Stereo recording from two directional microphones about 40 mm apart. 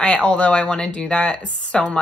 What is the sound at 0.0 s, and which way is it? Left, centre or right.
Speech, left.